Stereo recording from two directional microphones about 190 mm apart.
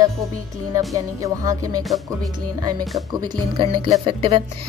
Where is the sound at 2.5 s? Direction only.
20° right (ahead or behind).